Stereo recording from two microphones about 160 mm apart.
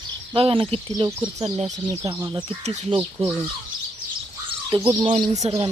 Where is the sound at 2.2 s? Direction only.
20° right (ahead or behind).